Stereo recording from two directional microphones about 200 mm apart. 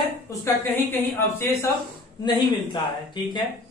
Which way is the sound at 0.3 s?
15° left (ahead or behind).